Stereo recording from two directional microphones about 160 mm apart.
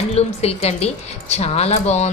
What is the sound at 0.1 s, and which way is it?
A woman's voice, 40° left (ahead or behind).